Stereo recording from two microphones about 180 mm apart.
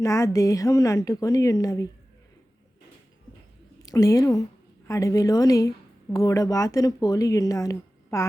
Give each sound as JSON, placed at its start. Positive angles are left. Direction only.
{"t": 0.0, "sound": "speech", "side_deg": 15}
{"t": 3.8, "sound": "a woman's voice", "side_deg": 20}